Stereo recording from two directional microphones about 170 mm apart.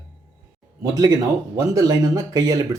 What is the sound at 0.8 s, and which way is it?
Speech, 20° right (ahead or behind).